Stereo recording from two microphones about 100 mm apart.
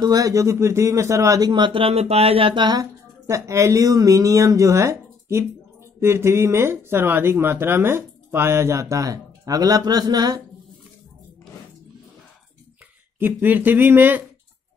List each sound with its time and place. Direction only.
0.0 s speech: 35° right (ahead or behind)
1.5 s speech: 55° right (ahead or behind)
2.8 s speech: 30° right (ahead or behind)
13.2 s speech: 20° right (ahead or behind)